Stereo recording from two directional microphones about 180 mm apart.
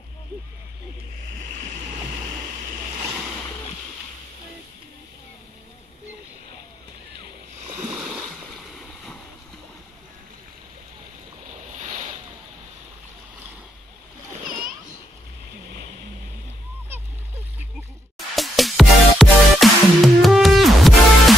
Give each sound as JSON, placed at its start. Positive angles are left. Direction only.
{"t": 11.7, "sound": "boat", "side_deg": -40}
{"t": 14.4, "sound": "splash", "side_deg": -50}
{"t": 18.1, "sound": "music", "side_deg": 0}